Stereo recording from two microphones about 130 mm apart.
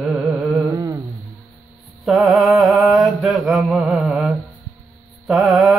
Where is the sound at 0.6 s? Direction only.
25° right (ahead or behind).